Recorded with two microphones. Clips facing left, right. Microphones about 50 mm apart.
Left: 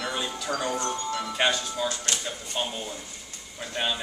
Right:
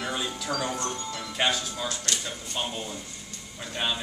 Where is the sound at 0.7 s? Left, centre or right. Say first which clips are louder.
Left 4 dB; left.